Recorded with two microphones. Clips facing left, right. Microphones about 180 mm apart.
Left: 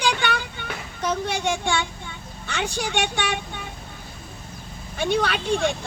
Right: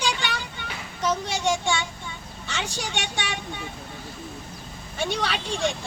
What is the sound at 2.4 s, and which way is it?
Speech, 55° left (ahead or behind).